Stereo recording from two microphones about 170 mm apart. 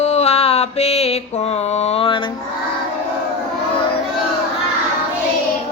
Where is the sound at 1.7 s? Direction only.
40° left (ahead or behind).